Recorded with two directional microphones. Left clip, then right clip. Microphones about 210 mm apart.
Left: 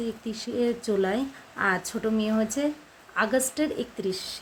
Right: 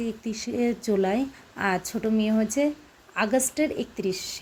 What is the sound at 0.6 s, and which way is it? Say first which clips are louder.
A woman's voice: right 1 dB; 15° right (ahead or behind).